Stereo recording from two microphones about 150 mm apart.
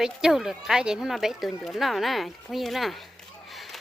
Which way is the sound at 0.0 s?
5° right (ahead or behind).